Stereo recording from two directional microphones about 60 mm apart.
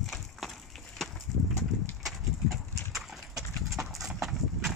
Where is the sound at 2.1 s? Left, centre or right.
Centre.